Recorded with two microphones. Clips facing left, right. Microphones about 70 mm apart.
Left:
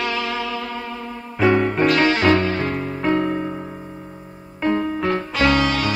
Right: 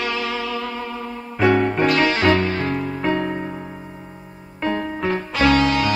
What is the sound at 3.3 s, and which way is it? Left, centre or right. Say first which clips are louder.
Keyboard: left 2 dB; centre.